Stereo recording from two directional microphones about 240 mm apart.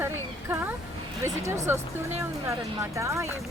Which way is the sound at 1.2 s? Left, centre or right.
Centre.